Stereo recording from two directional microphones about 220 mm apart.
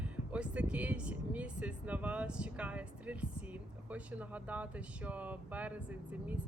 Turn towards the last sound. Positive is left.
turn(degrees=-5)  # may be behind; listen again after turning